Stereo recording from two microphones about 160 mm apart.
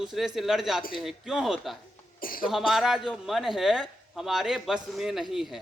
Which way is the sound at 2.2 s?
65° left (ahead or behind).